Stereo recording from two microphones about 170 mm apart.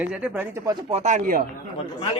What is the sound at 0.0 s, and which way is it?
Speech, 10° right (ahead or behind).